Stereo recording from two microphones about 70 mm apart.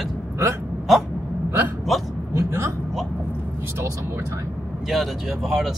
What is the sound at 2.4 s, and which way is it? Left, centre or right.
Speech, right.